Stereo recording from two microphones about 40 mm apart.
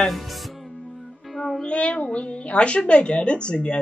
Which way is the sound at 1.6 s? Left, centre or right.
Left.